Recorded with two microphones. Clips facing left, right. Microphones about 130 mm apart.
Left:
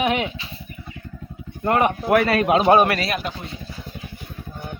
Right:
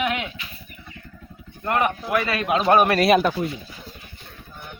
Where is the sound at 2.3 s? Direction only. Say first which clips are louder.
Left 5 dB; 35° left (ahead or behind).